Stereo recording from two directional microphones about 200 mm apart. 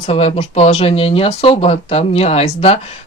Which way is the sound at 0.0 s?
30° left (ahead or behind).